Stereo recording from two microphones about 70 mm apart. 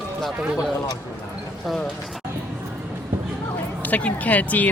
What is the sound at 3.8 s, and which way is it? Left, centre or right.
Speech, left.